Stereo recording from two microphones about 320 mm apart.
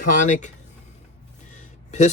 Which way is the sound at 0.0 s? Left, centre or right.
Left.